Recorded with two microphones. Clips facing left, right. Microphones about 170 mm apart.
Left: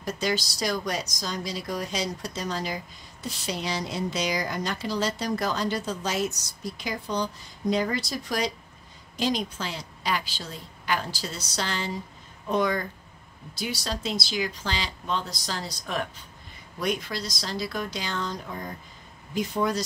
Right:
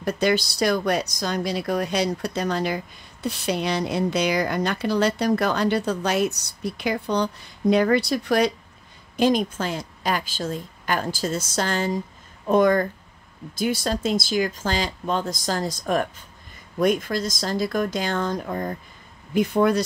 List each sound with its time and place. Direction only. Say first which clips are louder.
0.0 s a woman's voice: right 7 dB; 60° right (ahead or behind)